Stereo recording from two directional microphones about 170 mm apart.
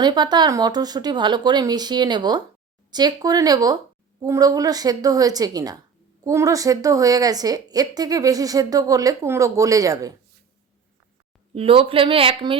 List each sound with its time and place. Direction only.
0.0 s a woman's voice: 25° right (ahead or behind)
11.5 s speech: 35° right (ahead or behind)